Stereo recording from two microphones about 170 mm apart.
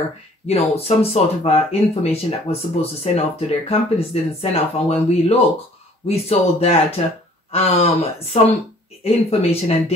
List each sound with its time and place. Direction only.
0.5 s speech: 40° left (ahead or behind)